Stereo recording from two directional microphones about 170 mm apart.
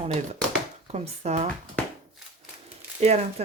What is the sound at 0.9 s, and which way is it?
Speech, 40° right (ahead or behind).